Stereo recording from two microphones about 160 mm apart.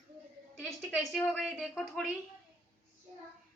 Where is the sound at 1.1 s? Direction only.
10° left (ahead or behind).